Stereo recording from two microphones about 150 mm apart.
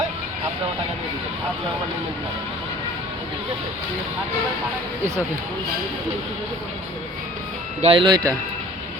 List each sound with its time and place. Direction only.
7.8 s speech: 35° right (ahead or behind)